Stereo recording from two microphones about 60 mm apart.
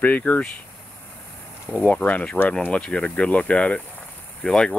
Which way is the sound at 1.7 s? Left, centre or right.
Left.